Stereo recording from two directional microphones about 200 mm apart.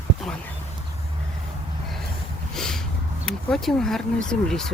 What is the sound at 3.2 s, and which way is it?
Speech, centre (ahead or behind).